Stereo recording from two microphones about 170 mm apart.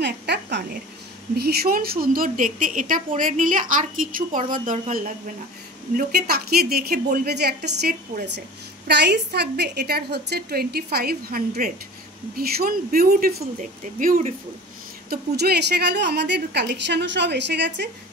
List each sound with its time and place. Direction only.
0.0 s speech: 85° right
1.3 s a woman's voice: 65° right (ahead or behind)
5.9 s a woman's voice: 65° right (ahead or behind); by 14.2 s 50° right (ahead or behind)
15.0 s a woman's voice: 70° right (ahead or behind); by 17.8 s 90° right